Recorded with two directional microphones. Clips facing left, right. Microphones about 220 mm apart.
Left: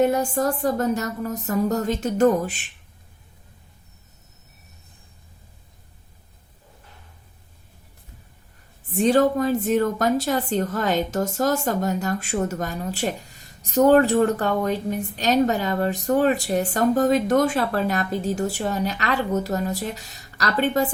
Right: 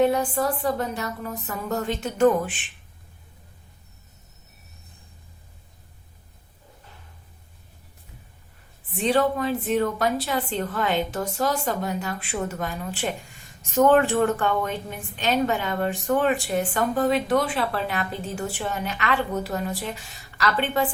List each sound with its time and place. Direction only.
0.0 s a woman's voice: 45° left (ahead or behind)
8.9 s a woman's voice: 45° left (ahead or behind)